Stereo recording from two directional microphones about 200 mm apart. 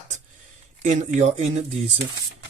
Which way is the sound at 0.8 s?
35° right (ahead or behind).